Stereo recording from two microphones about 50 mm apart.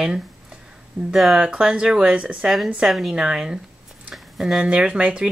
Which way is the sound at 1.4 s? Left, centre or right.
Centre.